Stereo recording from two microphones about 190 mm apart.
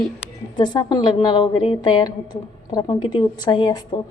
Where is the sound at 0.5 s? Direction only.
20° left (ahead or behind).